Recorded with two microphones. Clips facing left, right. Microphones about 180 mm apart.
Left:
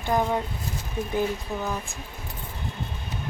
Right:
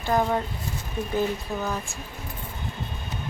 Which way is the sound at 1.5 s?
15° left (ahead or behind).